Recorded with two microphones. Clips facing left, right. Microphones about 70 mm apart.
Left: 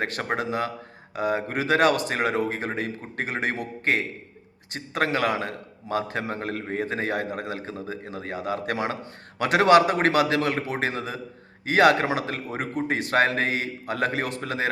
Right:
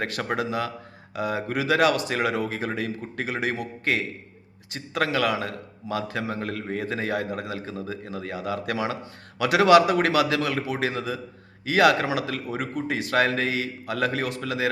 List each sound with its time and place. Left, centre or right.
0.0 s a man's voice: left